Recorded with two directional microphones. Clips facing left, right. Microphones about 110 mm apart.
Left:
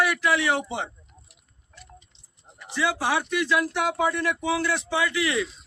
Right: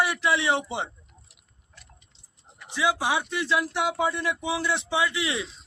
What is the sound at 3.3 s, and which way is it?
A man's voice, 25° right (ahead or behind).